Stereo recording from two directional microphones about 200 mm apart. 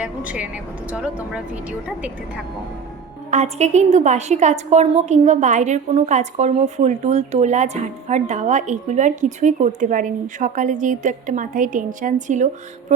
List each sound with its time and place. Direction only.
0.0 s a woman's voice: 5° right (ahead or behind)
3.2 s a woman's voice: 35° right (ahead or behind)